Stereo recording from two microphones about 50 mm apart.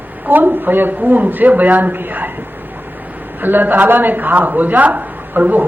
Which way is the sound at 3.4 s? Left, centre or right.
Right.